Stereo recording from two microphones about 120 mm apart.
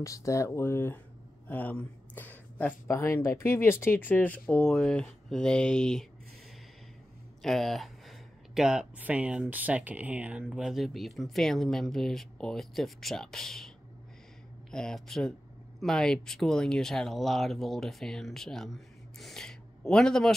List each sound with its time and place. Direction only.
0.0 s speech: 25° left (ahead or behind); by 6.0 s 5° left (ahead or behind)
7.4 s speech: centre (ahead or behind)
14.7 s speech: 5° left (ahead or behind)